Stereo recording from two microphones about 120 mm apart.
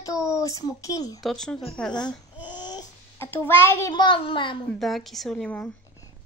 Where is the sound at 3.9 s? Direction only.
40° left (ahead or behind).